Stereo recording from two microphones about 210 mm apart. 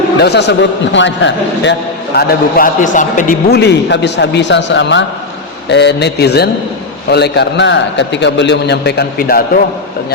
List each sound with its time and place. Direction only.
0.2 s a man's voice: 55° left (ahead or behind)
2.1 s a man's voice: 45° left (ahead or behind)